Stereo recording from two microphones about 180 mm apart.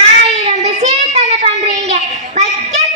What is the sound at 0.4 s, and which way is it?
Child singing, 40° right (ahead or behind).